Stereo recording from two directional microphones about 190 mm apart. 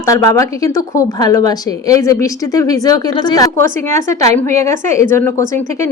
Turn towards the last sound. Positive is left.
turn(degrees=15)  # may be behind; listen again after turning